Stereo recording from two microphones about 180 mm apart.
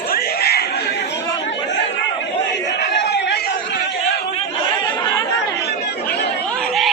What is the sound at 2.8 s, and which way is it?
Chatter, 70° left (ahead or behind).